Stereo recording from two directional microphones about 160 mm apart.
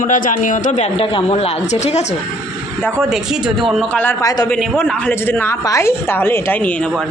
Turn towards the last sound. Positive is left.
turn(degrees=10)  # may be behind; listen again after turning